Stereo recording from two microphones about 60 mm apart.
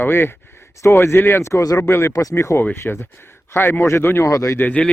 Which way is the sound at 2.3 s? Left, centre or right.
Left.